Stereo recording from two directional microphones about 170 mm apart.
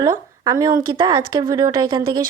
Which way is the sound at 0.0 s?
20° right (ahead or behind).